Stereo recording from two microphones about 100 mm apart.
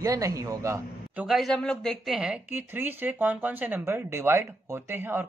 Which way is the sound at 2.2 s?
15° right (ahead or behind).